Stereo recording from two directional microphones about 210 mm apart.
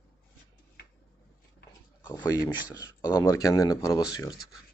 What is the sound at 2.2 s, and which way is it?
A man's voice, 15° left (ahead or behind).